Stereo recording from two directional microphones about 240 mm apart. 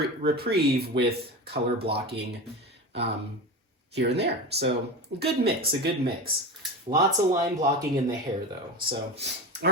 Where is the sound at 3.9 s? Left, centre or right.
Right.